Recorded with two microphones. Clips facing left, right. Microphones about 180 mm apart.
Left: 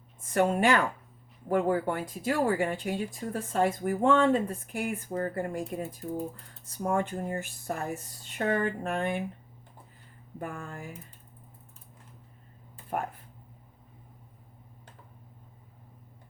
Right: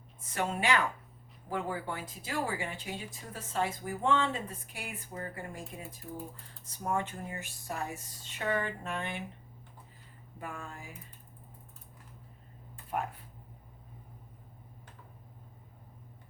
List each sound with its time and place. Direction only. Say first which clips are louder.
0.3 s speech: left 7 dB; 50° left (ahead or behind)
10.3 s speech: left 5 dB; 55° left (ahead or behind)